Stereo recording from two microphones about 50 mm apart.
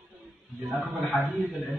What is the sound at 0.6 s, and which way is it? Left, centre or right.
Speech, right.